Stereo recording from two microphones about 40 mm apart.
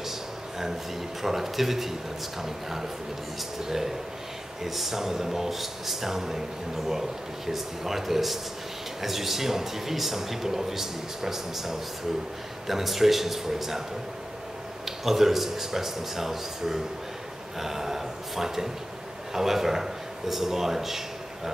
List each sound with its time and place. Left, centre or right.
1.2 s a man's voice: centre
14.9 s a man's voice: centre